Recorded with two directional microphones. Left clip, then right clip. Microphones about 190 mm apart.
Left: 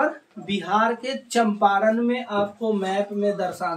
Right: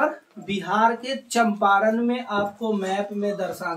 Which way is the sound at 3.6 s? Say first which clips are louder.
Left 2 dB; 20° left (ahead or behind).